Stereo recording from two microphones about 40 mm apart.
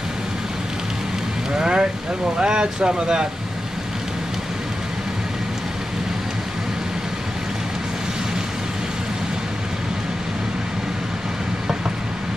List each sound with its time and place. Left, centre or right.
1.5 s vehicle: right
2.3 s speech: right